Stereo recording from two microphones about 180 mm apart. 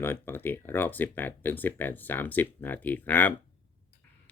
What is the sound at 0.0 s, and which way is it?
Speech, 10° left (ahead or behind).